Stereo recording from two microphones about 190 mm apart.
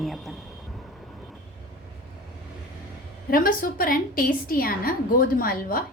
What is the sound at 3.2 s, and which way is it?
A woman's voice, 50° left (ahead or behind).